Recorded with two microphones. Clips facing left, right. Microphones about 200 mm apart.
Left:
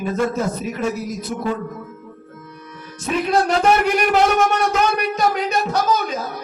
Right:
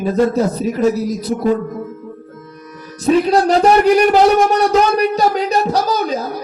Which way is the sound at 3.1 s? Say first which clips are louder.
Right 6 dB; 35° right (ahead or behind).